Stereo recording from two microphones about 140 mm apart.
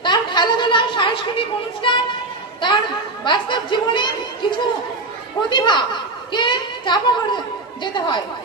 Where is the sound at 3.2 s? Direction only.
35° left (ahead or behind).